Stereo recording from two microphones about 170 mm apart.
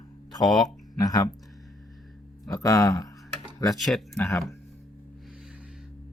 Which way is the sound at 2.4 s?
20° left (ahead or behind).